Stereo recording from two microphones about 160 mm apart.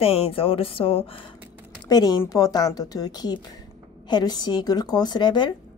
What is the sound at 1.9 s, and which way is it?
A woman's voice, 25° left (ahead or behind).